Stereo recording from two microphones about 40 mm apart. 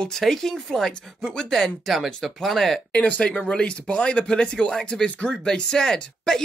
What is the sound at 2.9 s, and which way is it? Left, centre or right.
Speech, left.